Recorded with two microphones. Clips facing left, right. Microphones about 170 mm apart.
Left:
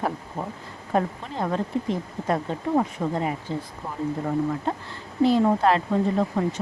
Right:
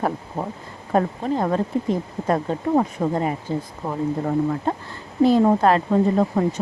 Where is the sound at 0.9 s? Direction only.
45° right (ahead or behind).